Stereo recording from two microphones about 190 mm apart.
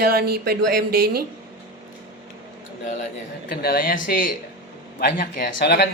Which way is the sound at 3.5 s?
55° left (ahead or behind).